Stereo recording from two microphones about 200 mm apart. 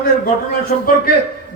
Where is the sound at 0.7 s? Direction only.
40° left (ahead or behind).